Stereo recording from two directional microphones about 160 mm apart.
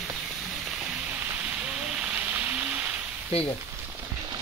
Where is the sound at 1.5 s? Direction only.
10° right (ahead or behind).